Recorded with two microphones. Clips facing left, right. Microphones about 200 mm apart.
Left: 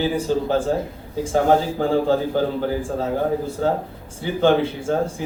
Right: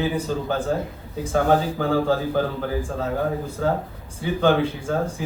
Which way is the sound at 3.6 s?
30° left (ahead or behind).